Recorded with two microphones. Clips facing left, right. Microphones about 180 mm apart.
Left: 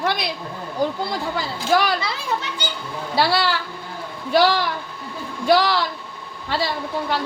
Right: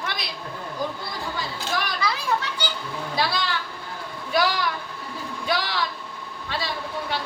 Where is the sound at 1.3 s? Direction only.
80° left.